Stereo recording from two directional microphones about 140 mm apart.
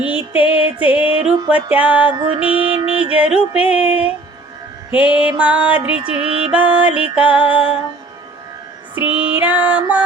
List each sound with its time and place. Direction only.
0.5 s music: 10° right (ahead or behind)
2.8 s music: 45° right (ahead or behind)
3.1 s music: 10° right (ahead or behind)
6.2 s music: 40° right (ahead or behind)
6.5 s music: 10° right (ahead or behind)
9.0 s music: 10° right (ahead or behind)